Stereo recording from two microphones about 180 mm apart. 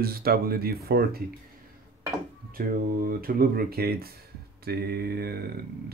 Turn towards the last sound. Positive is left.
turn(degrees=-60)  # may be behind; listen again after turning